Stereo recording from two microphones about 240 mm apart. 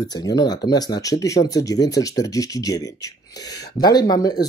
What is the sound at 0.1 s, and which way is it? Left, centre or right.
Speech, centre.